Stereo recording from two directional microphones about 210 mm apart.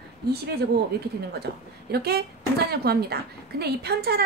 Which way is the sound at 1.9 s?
50° right (ahead or behind).